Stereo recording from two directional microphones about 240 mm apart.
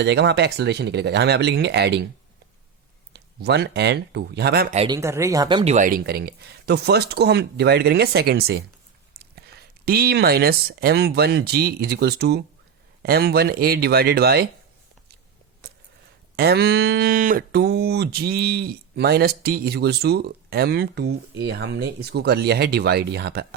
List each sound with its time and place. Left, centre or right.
0.0 s speech: right
3.1 s speech: right
4.7 s speech: right
4.9 s speech: centre; by 14.4 s right
15.6 s a sound: right
16.3 s speech: right